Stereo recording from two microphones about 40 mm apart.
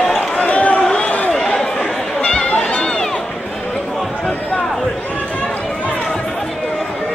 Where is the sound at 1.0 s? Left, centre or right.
Left.